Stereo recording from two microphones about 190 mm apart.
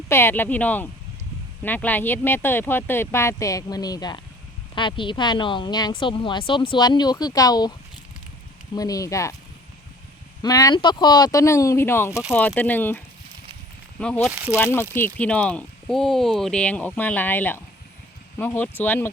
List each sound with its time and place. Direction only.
0.1 s a woman's voice: 10° left (ahead or behind)
8.7 s speech: 20° left (ahead or behind)
10.4 s speech: 20° left (ahead or behind)
14.0 s speech: 5° left (ahead or behind)
14.3 s speech: 5° right (ahead or behind)
14.6 s speech: 10° left (ahead or behind)